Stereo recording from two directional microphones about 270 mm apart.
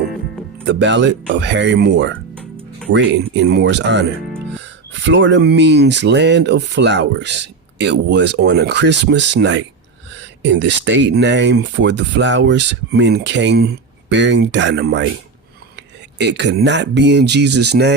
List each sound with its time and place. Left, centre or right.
0.7 s speech: right